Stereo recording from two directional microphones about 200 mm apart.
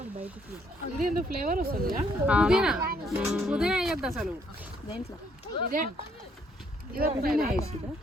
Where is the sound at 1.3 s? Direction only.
45° right (ahead or behind).